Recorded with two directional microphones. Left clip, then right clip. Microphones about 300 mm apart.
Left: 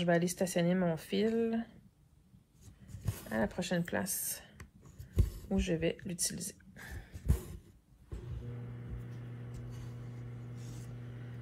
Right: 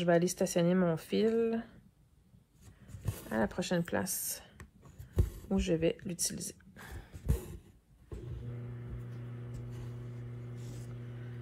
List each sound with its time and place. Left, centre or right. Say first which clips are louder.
0.0 s speech: right 2 dB; centre
3.3 s speech: right 1 dB; centre